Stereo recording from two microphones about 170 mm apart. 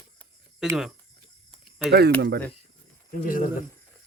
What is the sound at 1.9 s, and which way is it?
Speech, 70° right (ahead or behind).